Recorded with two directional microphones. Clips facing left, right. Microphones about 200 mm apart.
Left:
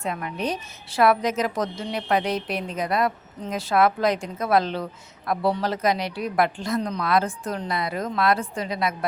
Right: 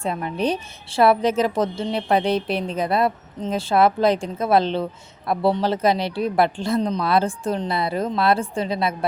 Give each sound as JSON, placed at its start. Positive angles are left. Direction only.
{"t": 0.0, "sound": "a woman's voice", "side_deg": -30}